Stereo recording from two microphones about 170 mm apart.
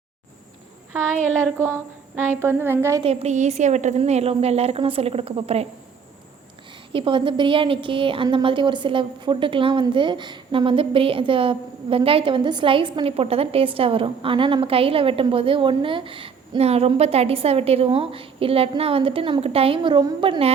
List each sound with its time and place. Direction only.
1.5 s a woman's voice: 15° right (ahead or behind)
3.0 s a woman's voice: 40° right (ahead or behind)
6.9 s a woman's voice: 30° right (ahead or behind)